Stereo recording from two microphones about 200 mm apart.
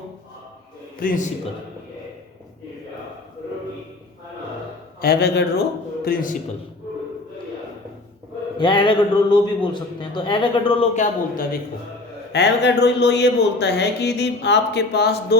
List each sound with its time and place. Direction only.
0.9 s a man's voice: 45° left (ahead or behind)
4.9 s a man's voice: 50° left (ahead or behind)
8.5 s a man's voice: 20° left (ahead or behind)
10.9 s a man's voice: 40° left (ahead or behind)
12.3 s speech: 60° left (ahead or behind)